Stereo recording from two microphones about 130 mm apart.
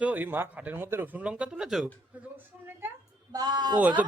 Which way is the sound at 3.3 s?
30° right (ahead or behind).